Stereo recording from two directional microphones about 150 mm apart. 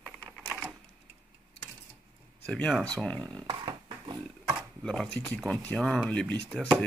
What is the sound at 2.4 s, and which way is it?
Speech, 5° left (ahead or behind).